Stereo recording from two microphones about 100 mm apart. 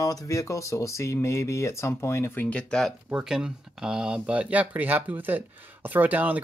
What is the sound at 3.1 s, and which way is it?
Speech, 10° right (ahead or behind).